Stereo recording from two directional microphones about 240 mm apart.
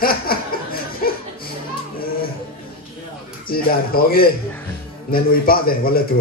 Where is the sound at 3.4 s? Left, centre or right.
Left.